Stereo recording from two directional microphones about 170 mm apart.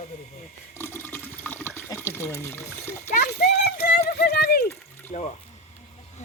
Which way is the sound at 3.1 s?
65° left (ahead or behind).